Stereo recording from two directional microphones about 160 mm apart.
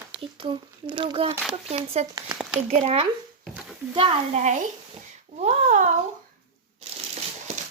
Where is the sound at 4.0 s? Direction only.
40° right (ahead or behind).